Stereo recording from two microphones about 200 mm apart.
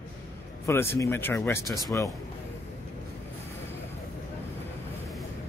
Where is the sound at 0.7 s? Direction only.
10° left (ahead or behind).